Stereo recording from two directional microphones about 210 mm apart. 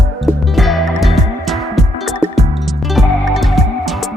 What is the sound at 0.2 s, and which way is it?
Music, centre (ahead or behind).